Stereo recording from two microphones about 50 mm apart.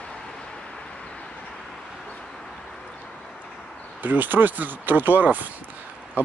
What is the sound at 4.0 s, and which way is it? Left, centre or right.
Speech, right.